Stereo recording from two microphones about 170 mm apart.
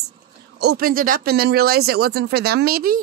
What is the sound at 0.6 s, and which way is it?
Speech, 70° right (ahead or behind).